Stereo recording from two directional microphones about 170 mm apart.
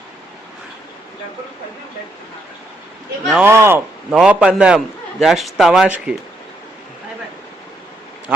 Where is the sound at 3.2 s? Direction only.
5° right (ahead or behind).